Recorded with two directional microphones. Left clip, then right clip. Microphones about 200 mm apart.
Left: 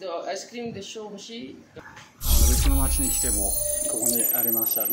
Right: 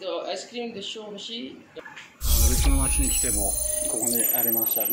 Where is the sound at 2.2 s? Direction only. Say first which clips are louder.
Even; centre (ahead or behind).